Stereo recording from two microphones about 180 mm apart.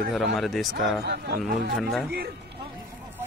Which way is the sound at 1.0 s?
65° right (ahead or behind).